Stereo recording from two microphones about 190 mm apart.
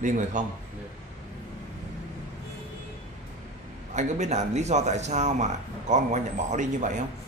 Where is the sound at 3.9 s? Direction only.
40° right (ahead or behind).